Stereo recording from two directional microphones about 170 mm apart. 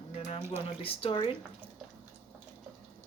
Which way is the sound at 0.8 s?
35° left (ahead or behind).